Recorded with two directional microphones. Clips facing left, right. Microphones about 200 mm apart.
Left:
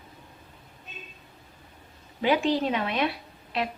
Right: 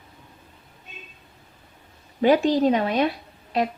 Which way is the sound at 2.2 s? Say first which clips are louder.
Right 6 dB; 40° right (ahead or behind).